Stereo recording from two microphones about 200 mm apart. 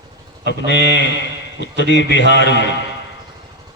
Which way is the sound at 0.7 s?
65° left (ahead or behind).